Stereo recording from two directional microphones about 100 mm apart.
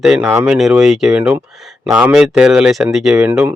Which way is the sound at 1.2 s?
15° right (ahead or behind).